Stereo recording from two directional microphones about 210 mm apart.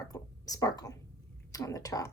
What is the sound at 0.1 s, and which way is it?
A woman's voice, 15° left (ahead or behind).